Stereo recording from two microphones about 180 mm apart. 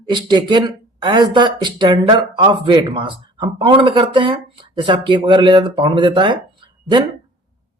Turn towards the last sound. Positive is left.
turn(degrees=-25)  # may be behind; listen again after turning